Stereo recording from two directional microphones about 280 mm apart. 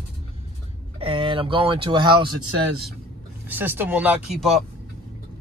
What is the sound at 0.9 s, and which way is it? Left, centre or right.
Speech, centre.